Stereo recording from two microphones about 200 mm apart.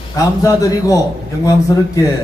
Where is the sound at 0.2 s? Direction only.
15° left (ahead or behind).